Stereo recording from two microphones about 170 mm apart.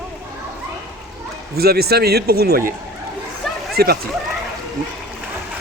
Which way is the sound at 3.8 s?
65° right (ahead or behind).